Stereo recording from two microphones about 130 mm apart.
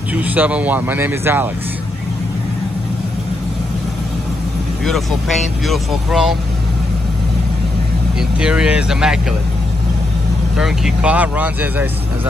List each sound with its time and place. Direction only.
0.1 s speech: 10° right (ahead or behind)
5.7 s speech: 5° right (ahead or behind)
8.2 s speech: 5° right (ahead or behind)
10.6 s speech: 5° right (ahead or behind)